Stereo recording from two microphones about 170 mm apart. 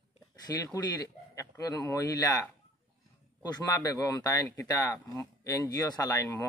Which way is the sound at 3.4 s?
25° left (ahead or behind).